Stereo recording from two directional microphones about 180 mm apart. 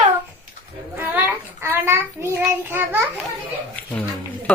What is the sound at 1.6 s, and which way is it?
Child singing, 15° right (ahead or behind).